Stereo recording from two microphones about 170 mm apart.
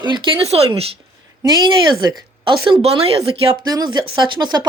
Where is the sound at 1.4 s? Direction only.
25° right (ahead or behind).